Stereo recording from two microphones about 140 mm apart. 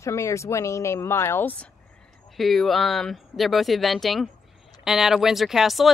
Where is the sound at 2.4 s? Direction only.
Centre (ahead or behind).